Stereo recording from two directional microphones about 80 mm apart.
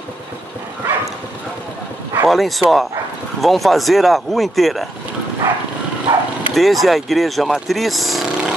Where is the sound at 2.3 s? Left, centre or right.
Centre.